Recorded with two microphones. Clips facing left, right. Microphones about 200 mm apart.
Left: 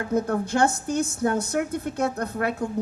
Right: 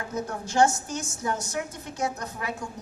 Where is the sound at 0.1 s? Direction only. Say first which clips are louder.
Left 8 dB; 60° left (ahead or behind).